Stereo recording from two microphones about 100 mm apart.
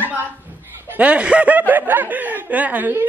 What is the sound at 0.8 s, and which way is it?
Speech, 15° right (ahead or behind).